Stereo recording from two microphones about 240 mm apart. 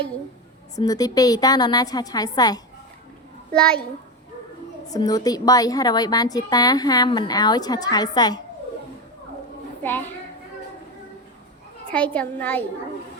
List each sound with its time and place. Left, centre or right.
0.8 s a woman's voice: centre
3.5 s a child's voice: centre
4.9 s a woman's voice: centre
11.9 s a child's voice: centre